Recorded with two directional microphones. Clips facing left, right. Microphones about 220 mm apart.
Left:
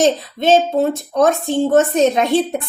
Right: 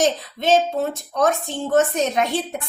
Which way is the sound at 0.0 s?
25° left (ahead or behind).